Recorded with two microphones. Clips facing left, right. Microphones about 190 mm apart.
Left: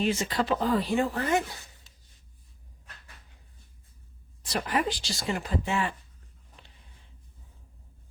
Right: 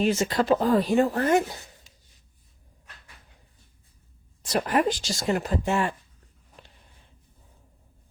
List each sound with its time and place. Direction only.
0.0 s speech: 45° right (ahead or behind)
4.4 s speech: 45° right (ahead or behind)